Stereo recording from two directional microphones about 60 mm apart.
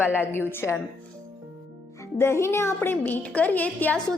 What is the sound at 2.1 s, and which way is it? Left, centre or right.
Speech, left.